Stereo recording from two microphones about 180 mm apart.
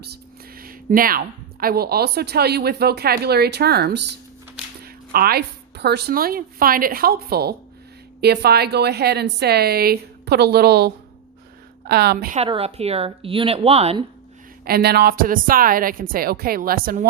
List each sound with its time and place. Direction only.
0.0 s speech: 60° right (ahead or behind)
5.1 s a woman's voice: 60° right (ahead or behind)
12.4 s a woman's voice: 35° right (ahead or behind)
14.6 s speech: 60° right (ahead or behind)